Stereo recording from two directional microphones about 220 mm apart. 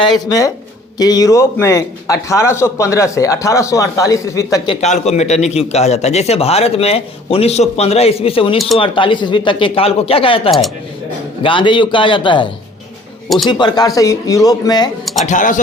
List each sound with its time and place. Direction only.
0.0 s a man's voice: 15° left (ahead or behind)
13.5 s a man's voice: 20° left (ahead or behind)
15.0 s speech: centre (ahead or behind)
15.3 s a man's voice: 35° left (ahead or behind)